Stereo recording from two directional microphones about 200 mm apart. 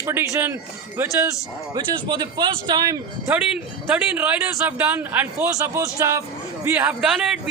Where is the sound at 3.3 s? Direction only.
5° right (ahead or behind).